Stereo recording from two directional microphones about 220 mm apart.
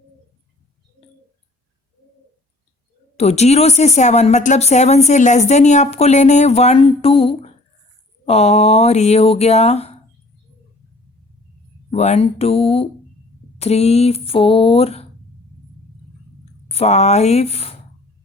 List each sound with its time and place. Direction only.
3.2 s speech: 30° left (ahead or behind)
11.9 s speech: 30° left (ahead or behind)
16.6 s speech: 30° left (ahead or behind)